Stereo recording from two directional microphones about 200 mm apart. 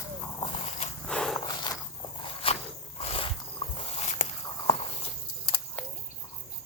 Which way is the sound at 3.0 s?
30° left (ahead or behind).